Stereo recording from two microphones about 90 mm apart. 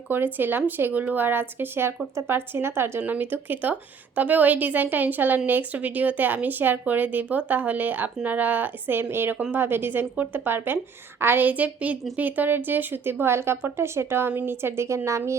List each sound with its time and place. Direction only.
0.1 s a woman's voice: 20° right (ahead or behind)